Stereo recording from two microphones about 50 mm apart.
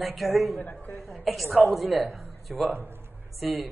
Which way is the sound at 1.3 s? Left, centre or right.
Centre.